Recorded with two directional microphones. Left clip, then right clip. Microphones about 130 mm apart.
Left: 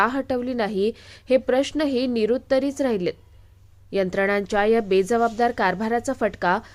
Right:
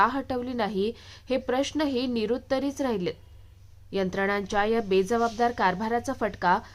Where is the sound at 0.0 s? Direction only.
25° left (ahead or behind).